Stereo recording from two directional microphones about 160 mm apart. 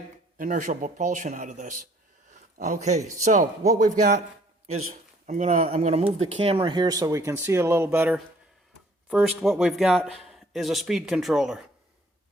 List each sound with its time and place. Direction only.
0.3 s speech: 55° right (ahead or behind)
2.6 s speech: 80° right
3.2 s a man's voice: 50° right (ahead or behind); by 11.6 s 5° right (ahead or behind)